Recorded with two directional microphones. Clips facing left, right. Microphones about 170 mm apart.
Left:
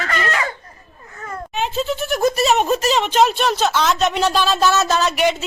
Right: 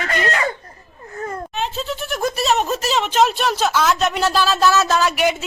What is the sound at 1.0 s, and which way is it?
Baby cry, 35° right (ahead or behind).